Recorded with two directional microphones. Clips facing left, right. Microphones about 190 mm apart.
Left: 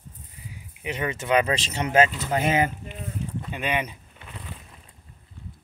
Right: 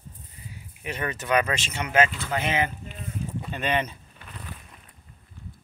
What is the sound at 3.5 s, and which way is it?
Vehicle, 10° left (ahead or behind).